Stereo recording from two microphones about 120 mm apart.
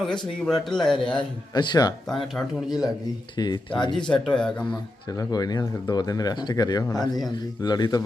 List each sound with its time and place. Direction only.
0.7 s speech: 5° left (ahead or behind)
1.5 s speech: 35° left (ahead or behind)
2.0 s speech: centre (ahead or behind)
3.3 s speech: 40° left (ahead or behind)
4.0 s speech: 5° left (ahead or behind)
4.7 s speech: 35° left (ahead or behind)